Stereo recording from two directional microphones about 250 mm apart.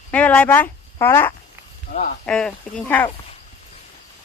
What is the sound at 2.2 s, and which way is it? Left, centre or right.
Speech, centre.